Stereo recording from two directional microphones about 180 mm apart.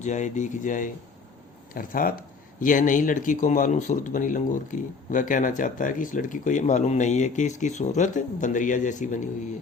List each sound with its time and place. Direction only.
0.0 s speech: 40° left (ahead or behind)